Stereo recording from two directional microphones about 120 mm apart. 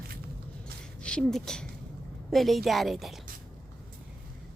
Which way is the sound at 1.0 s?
10° left (ahead or behind).